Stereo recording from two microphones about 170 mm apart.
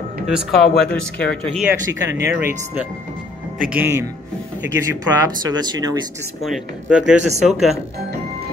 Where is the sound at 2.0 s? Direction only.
85° right.